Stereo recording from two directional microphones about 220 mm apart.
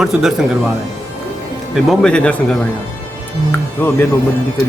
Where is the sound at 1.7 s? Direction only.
5° left (ahead or behind).